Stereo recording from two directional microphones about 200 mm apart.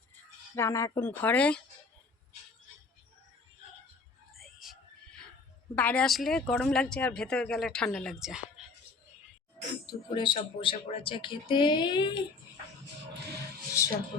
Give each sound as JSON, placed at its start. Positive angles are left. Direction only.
{"t": 0.5, "sound": "speech", "side_deg": 15}
{"t": 4.4, "sound": "whispering", "side_deg": 0}
{"t": 5.7, "sound": "speech", "side_deg": 5}
{"t": 9.8, "sound": "speech", "side_deg": 25}
{"t": 13.8, "sound": "speech", "side_deg": 15}